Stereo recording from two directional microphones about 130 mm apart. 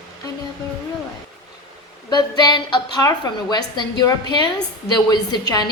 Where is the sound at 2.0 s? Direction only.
30° left (ahead or behind).